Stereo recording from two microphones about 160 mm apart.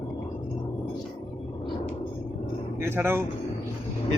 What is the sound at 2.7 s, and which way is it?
Speech, 15° right (ahead or behind).